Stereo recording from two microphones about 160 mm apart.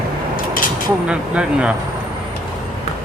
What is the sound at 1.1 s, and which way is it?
Speech, 5° right (ahead or behind).